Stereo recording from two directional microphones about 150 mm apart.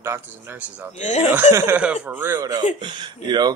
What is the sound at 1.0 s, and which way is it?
Speech, 50° left (ahead or behind).